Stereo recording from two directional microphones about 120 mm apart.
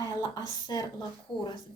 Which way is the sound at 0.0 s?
35° left (ahead or behind).